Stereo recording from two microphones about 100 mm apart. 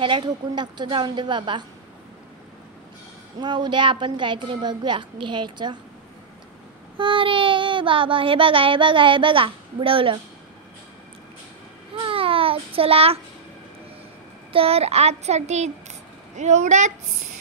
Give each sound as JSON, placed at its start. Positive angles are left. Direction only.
{"t": 0.0, "sound": "a woman's voice", "side_deg": -50}
{"t": 3.3, "sound": "a woman's voice", "side_deg": -45}
{"t": 7.0, "sound": "child singing", "side_deg": -60}
{"t": 11.9, "sound": "child singing", "side_deg": -65}
{"t": 14.5, "sound": "a child's voice", "side_deg": -75}